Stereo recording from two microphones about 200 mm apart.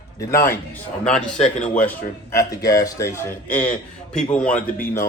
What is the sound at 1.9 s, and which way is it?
A man's voice, 15° left (ahead or behind).